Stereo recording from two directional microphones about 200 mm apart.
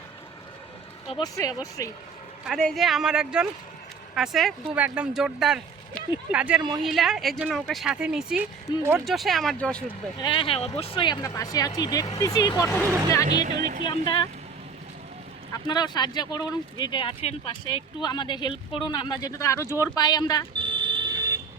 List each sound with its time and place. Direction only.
1.0 s speech: 25° left (ahead or behind)
1.8 s speech: 15° left (ahead or behind)
2.4 s speech: centre (ahead or behind)
10.2 s speech: 25° left (ahead or behind)
13.3 s speech: 45° right (ahead or behind)
13.8 s speech: 25° left (ahead or behind)
15.5 s speech: 20° left (ahead or behind)
20.6 s smoke detector: 25° right (ahead or behind)